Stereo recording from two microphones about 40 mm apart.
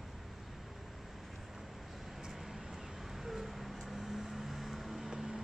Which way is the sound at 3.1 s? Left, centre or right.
Centre.